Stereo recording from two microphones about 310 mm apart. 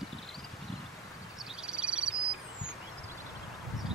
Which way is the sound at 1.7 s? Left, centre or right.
Centre.